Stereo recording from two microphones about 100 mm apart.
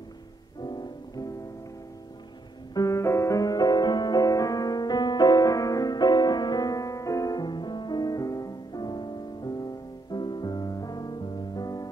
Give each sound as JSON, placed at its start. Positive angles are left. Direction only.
{"t": 0.6, "sound": "music", "side_deg": 45}
{"t": 2.7, "sound": "music", "side_deg": 35}